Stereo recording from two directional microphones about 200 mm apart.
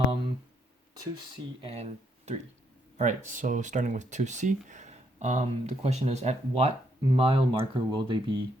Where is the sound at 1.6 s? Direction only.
30° right (ahead or behind).